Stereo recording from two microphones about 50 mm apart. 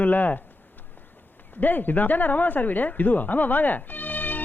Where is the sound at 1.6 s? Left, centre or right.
Left.